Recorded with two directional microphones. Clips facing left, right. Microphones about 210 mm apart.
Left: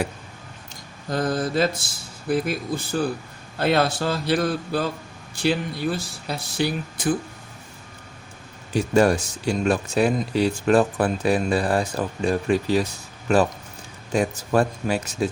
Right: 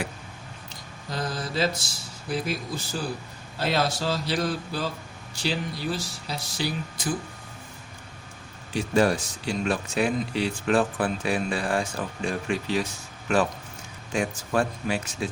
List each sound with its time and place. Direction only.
1.1 s mantra: 50° left (ahead or behind)
2.3 s speech: 55° left (ahead or behind)
8.7 s speech: 45° left (ahead or behind)